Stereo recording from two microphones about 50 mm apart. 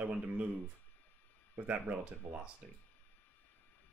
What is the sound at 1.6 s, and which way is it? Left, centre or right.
Speech, right.